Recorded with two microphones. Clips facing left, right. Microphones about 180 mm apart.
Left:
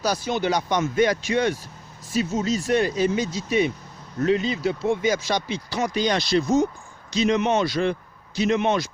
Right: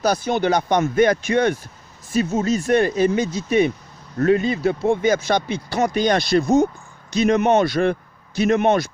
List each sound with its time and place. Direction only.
0.0 s speech: 55° right (ahead or behind)